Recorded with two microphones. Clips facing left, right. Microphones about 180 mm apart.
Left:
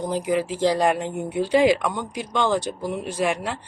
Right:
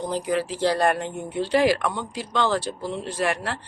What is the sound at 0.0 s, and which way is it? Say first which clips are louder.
Speech: left 2 dB; 15° left (ahead or behind).